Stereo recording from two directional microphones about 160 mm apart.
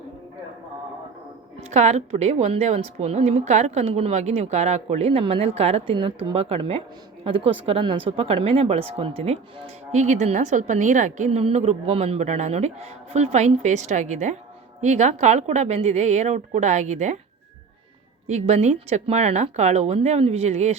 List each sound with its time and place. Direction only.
1.7 s speech: 45° right (ahead or behind)
18.3 s speech: 45° right (ahead or behind)